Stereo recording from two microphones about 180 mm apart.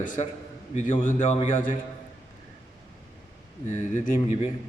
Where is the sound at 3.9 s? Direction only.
40° left (ahead or behind).